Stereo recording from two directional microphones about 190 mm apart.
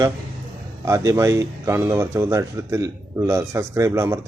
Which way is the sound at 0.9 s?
15° right (ahead or behind).